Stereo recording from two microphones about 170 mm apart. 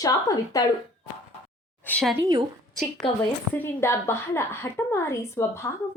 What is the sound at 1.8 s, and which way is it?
Speech, 5° left (ahead or behind).